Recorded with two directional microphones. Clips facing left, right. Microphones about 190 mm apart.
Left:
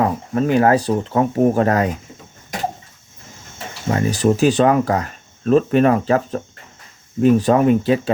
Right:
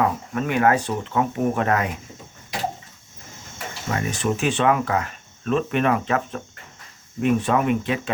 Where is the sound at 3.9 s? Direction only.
35° left (ahead or behind).